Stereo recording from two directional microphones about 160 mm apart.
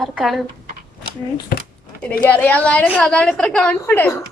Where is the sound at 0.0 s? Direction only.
Centre (ahead or behind).